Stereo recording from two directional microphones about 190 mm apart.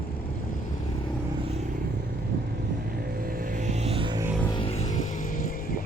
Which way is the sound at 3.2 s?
50° right (ahead or behind).